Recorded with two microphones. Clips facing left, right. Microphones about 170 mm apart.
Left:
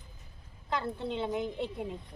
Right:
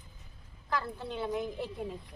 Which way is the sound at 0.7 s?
25° left (ahead or behind).